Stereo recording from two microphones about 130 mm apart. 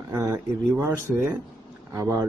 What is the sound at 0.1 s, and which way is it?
Speech, 25° right (ahead or behind).